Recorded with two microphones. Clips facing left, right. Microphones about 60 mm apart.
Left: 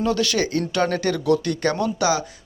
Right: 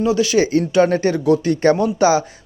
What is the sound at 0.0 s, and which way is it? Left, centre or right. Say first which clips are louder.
Speech: right 5 dB; centre.